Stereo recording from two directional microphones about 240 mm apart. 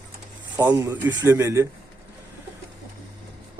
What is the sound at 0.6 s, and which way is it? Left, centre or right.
Speech, centre.